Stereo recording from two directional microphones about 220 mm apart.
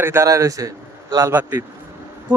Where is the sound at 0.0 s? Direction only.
10° right (ahead or behind).